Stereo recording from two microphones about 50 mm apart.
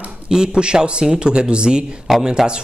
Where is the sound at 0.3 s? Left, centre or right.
Centre.